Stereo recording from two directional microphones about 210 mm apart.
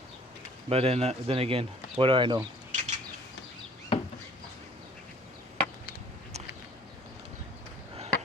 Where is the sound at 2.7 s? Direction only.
35° right (ahead or behind).